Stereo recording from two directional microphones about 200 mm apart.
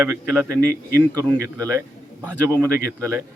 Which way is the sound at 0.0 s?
10° right (ahead or behind).